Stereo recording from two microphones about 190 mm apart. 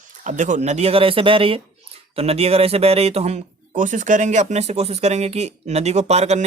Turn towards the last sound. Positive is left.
turn(degrees=-35)  # may be behind; listen again after turning